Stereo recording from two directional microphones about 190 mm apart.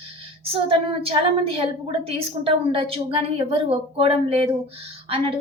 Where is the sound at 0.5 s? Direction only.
30° right (ahead or behind).